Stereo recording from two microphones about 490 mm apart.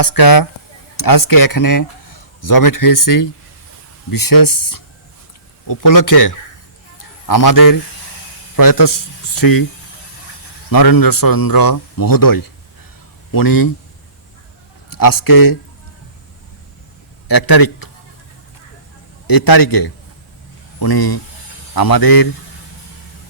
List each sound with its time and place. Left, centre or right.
0.0 s a man's voice: left
10.7 s speech: left
14.8 s a man's voice: left
17.2 s a man's voice: left
19.3 s speech: left